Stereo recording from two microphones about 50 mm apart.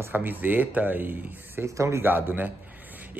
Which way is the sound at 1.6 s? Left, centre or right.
Right.